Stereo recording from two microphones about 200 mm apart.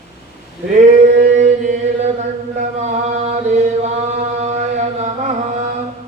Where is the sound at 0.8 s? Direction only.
35° right (ahead or behind).